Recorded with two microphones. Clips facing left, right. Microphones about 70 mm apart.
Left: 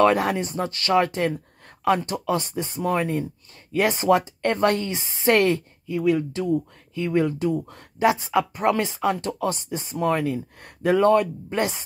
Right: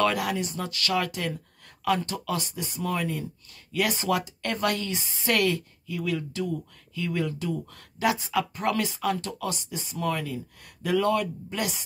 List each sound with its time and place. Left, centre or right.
0.0 s speech: left
10.2 s speech: left